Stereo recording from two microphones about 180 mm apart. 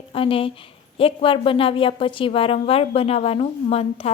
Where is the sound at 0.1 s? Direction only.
30° left (ahead or behind).